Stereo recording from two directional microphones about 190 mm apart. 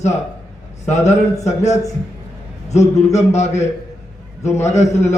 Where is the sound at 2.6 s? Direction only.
35° left (ahead or behind).